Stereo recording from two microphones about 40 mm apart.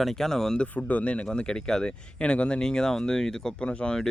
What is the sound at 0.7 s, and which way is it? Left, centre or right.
Speech, left.